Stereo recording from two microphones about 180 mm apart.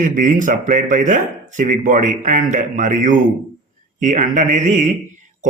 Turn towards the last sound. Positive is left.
turn(degrees=-45)  # may be behind; listen again after turning